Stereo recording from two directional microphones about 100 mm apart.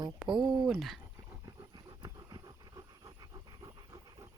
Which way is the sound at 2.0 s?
40° right (ahead or behind).